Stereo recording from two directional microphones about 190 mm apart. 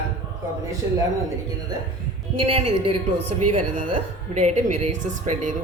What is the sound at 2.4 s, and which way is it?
A woman's voice, 30° right (ahead or behind).